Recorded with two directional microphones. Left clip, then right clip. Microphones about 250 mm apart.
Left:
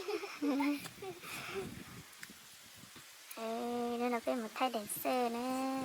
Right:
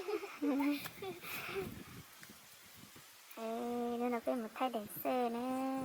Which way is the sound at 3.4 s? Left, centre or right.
Centre.